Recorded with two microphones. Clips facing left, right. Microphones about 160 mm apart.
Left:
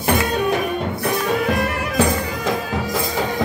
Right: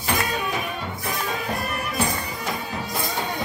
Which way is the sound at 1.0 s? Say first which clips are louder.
Left 8 dB; 90° left.